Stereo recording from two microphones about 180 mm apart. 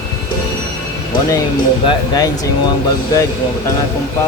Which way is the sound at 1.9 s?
20° left (ahead or behind).